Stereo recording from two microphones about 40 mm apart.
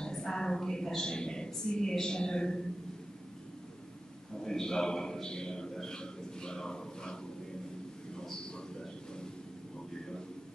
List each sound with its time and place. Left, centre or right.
0.0 s a woman's voice: centre
4.5 s a man's voice: centre